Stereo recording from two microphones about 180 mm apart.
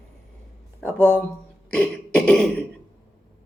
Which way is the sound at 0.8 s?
10° left (ahead or behind).